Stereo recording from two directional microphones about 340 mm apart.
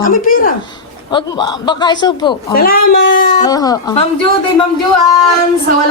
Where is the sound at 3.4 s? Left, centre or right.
Centre.